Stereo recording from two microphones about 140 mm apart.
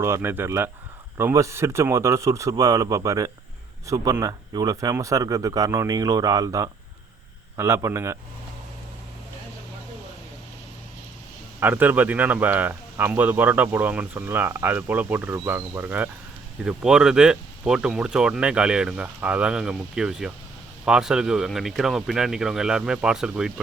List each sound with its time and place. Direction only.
0.0 s a man's voice: 15° right (ahead or behind)
11.6 s speech: 15° right (ahead or behind)